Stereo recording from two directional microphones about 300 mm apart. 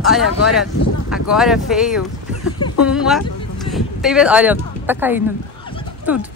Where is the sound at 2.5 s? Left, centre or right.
Left.